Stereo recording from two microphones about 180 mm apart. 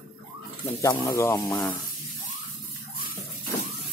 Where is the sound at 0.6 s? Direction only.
15° left (ahead or behind).